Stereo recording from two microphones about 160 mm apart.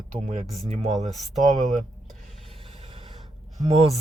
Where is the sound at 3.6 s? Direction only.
40° right (ahead or behind).